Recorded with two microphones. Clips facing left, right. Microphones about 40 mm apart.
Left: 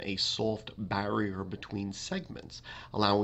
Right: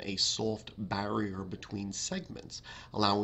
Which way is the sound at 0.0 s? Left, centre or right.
Centre.